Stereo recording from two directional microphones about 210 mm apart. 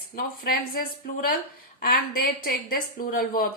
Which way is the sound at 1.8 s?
45° left (ahead or behind).